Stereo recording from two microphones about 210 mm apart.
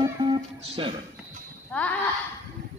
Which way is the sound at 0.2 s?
25° right (ahead or behind).